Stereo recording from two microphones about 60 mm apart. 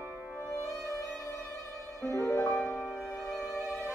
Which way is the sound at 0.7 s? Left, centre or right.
Left.